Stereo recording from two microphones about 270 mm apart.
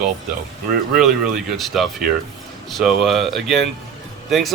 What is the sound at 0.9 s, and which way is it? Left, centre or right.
Speech, centre.